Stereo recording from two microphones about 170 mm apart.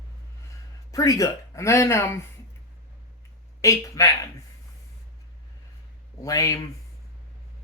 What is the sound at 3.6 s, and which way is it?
Speech, 20° left (ahead or behind).